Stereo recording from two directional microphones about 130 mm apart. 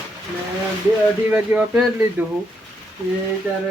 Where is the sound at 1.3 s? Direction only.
10° right (ahead or behind).